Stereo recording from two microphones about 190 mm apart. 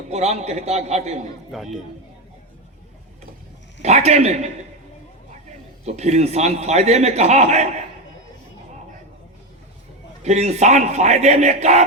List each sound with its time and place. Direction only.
0.1 s a man's voice: 35° right (ahead or behind)
1.5 s speech: centre (ahead or behind)
3.8 s a man's voice: 35° right (ahead or behind)
5.8 s a man's voice: 35° right (ahead or behind)
10.2 s a man's voice: 35° right (ahead or behind)